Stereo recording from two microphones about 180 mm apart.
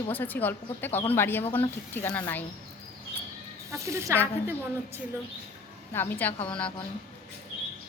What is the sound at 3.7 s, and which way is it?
Speech, 15° right (ahead or behind).